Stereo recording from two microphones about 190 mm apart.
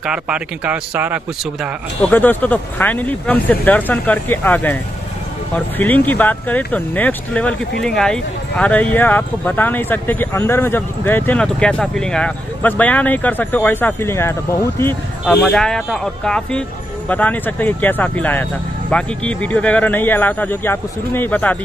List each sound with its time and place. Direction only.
0.0 s speech: 5° right (ahead or behind)
2.0 s speech: 10° left (ahead or behind)
5.8 s speech: 10° left (ahead or behind)